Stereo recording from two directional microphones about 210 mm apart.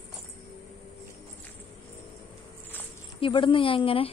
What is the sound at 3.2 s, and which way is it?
Speech, 25° left (ahead or behind).